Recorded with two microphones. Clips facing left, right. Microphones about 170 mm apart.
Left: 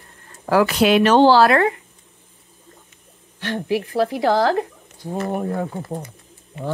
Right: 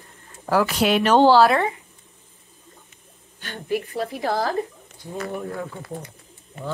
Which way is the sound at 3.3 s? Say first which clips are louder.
Left 4 dB; 90° left.